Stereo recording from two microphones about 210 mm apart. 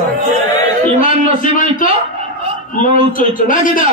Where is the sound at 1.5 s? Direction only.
40° left (ahead or behind).